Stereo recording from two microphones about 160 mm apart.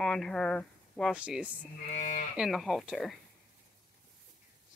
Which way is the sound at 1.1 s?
5° right (ahead or behind).